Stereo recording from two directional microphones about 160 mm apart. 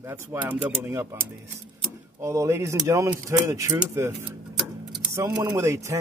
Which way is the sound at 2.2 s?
20° right (ahead or behind).